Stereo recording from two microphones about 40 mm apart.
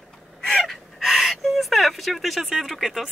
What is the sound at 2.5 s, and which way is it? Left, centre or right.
Speech, centre.